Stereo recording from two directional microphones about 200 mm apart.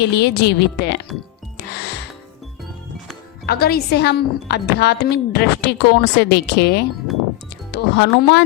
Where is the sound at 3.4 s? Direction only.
50° left (ahead or behind).